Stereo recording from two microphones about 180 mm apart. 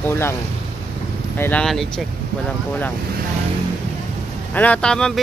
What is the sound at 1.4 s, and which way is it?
Speech, 5° left (ahead or behind).